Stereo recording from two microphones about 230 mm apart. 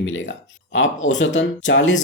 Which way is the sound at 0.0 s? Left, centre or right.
Left.